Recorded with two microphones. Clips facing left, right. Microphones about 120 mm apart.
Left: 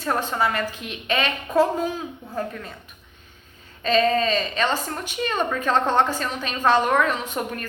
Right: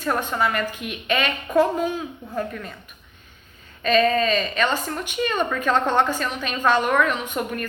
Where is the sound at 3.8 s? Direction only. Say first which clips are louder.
Right 1 dB; 30° left (ahead or behind).